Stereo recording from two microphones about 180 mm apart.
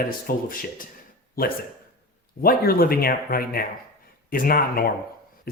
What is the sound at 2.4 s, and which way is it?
Speech, 55° left (ahead or behind).